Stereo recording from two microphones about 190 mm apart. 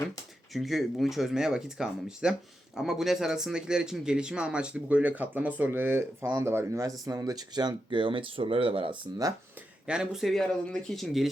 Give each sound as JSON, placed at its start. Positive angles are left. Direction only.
{"t": 0.5, "sound": "speech", "side_deg": 0}
{"t": 9.8, "sound": "speech", "side_deg": -5}